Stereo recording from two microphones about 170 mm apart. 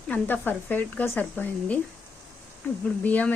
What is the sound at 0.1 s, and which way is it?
Speech, 10° left (ahead or behind).